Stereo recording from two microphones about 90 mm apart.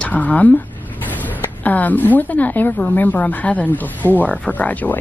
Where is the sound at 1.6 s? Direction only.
20° left (ahead or behind).